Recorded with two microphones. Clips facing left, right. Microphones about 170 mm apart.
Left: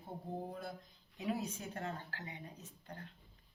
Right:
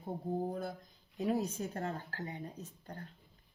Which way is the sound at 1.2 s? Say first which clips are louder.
Right 6 dB; 40° right (ahead or behind).